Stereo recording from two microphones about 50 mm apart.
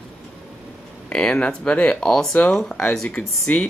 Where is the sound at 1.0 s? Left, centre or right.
Left.